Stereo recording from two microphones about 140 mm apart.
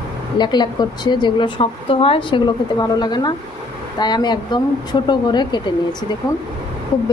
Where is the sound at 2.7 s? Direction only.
30° left (ahead or behind).